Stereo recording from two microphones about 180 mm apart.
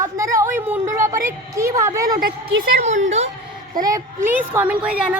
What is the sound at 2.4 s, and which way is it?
Speech, 40° right (ahead or behind).